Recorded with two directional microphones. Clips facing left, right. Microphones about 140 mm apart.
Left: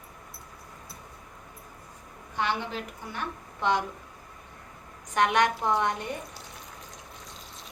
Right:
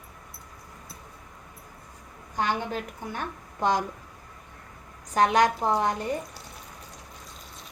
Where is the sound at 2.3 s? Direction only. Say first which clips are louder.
Right 2 dB; 45° right (ahead or behind).